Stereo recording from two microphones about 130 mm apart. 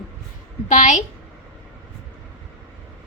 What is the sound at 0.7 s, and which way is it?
Speech, 70° left (ahead or behind).